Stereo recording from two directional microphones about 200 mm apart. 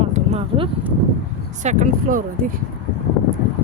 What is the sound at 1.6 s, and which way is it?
Speech, 40° right (ahead or behind).